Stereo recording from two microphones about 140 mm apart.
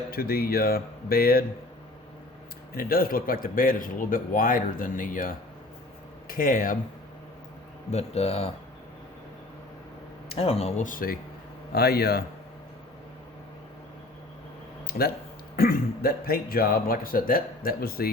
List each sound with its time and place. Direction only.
0.1 s a man's voice: 90° left
2.7 s speech: 90° left; by 5.3 s 75° left (ahead or behind)
6.2 s speech: 85° left
7.9 s speech: 50° left (ahead or behind)
10.3 s speech: 45° left (ahead or behind)
10.8 s a man's voice: 85° left
14.8 s a sound: 90° left
15.5 s a man's voice: 90° left